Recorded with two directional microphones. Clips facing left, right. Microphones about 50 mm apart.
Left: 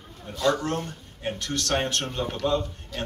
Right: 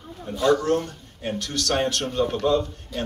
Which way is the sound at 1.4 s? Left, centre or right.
Left.